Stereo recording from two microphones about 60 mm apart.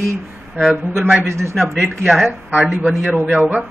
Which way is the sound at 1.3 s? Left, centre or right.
Right.